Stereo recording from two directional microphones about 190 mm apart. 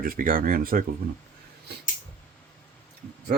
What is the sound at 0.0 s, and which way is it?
Speech, 50° right (ahead or behind).